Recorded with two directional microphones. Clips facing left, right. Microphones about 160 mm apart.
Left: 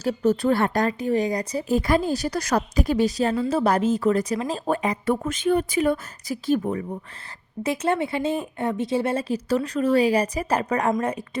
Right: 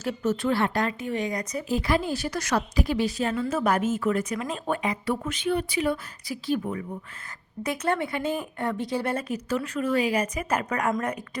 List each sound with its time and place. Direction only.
0.0 s speech: 35° left (ahead or behind)
7.6 s speech: 25° left (ahead or behind)